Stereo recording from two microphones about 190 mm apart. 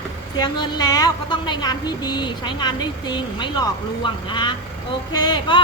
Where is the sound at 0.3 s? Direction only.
25° left (ahead or behind).